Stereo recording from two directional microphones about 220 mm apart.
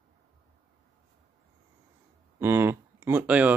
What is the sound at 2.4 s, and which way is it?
Speech, 10° right (ahead or behind).